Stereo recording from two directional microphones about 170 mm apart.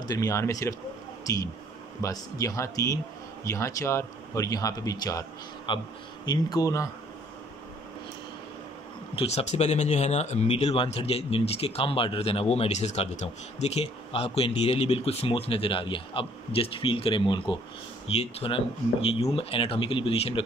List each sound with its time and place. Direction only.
0.1 s speech: 20° left (ahead or behind)
9.1 s speech: 35° left (ahead or behind)